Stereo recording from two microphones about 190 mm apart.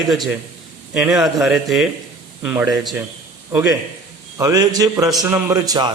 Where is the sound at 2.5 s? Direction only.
20° right (ahead or behind).